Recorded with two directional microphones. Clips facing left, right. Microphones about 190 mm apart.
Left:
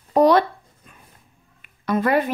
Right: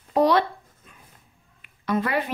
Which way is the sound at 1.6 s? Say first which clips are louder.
Left 3 dB; 45° left (ahead or behind).